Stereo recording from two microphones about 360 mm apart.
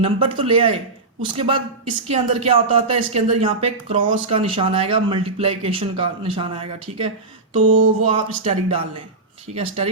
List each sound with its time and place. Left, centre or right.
0.0 s a woman's voice: centre